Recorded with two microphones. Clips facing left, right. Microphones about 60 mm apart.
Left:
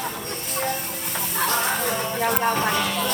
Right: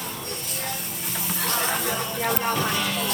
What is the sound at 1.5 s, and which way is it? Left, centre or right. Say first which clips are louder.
Music: left 1 dB; left.